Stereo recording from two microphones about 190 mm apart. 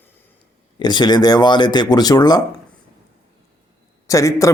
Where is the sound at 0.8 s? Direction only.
20° left (ahead or behind).